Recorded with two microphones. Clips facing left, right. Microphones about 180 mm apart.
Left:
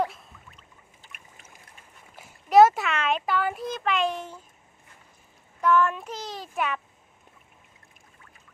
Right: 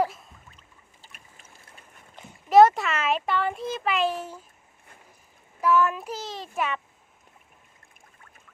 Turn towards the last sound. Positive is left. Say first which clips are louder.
# even
turn(degrees=0)  # may be behind; listen again after turning